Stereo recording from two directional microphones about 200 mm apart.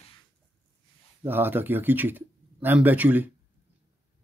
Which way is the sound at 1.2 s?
10° right (ahead or behind).